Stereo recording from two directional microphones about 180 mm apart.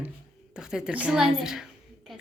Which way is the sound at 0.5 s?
5° right (ahead or behind).